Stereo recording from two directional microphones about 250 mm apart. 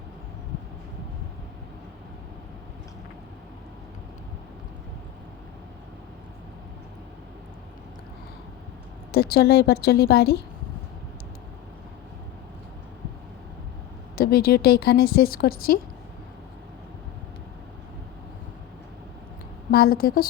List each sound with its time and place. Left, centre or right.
9.1 s speech: left
14.2 s speech: left
19.7 s speech: left